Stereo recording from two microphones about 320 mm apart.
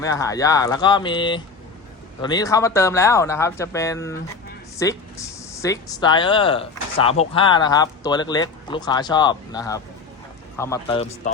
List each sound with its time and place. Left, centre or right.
0.0 s speech: centre